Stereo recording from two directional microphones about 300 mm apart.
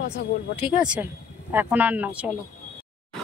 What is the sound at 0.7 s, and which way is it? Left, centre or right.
Speech, centre.